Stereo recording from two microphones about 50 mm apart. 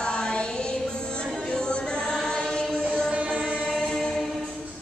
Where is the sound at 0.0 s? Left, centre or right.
Centre.